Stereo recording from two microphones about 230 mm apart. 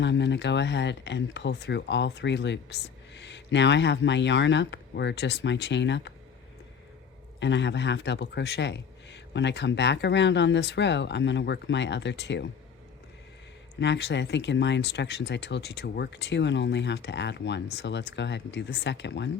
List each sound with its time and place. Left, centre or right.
0.0 s speech: left
7.3 s speech: left
13.7 s speech: left